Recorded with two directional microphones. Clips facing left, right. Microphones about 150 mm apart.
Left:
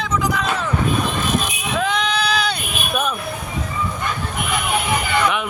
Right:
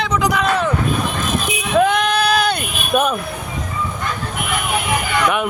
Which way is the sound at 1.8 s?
55° right (ahead or behind).